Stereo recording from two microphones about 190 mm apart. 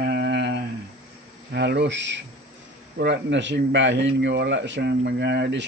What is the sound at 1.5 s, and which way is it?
A man's voice, 60° right (ahead or behind).